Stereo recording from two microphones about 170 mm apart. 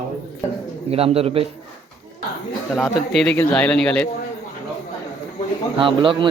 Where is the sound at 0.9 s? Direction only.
35° right (ahead or behind).